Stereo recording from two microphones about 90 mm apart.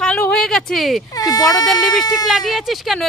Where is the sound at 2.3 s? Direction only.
Centre (ahead or behind).